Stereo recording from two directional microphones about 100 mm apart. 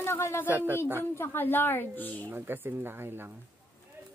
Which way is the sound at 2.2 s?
20° right (ahead or behind).